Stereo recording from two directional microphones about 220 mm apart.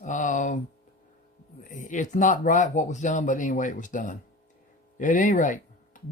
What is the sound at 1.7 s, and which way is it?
Speech, 35° left (ahead or behind).